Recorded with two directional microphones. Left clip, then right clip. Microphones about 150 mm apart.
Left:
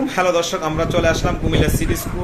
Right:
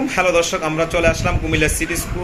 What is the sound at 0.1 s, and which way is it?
A man's voice, 5° right (ahead or behind).